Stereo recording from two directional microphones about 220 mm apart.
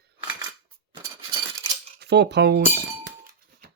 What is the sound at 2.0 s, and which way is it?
Speech, 50° right (ahead or behind).